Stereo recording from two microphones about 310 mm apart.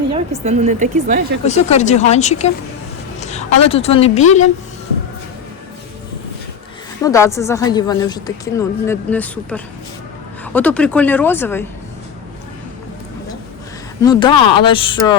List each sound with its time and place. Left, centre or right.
0.1 s speech: right
1.5 s a woman's voice: left
7.0 s a woman's voice: centre
14.0 s speech: centre